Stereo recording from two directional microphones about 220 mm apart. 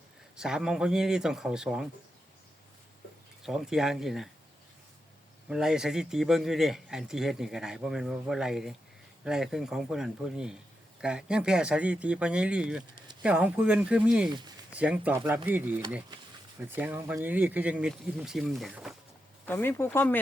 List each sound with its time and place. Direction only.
0.3 s a man's voice: centre (ahead or behind)
3.4 s a man's voice: centre (ahead or behind)
5.5 s a man's voice: 5° right (ahead or behind)
14.3 s speech: 20° right (ahead or behind)
14.7 s speech: 5° right (ahead or behind)
19.5 s speech: 10° left (ahead or behind)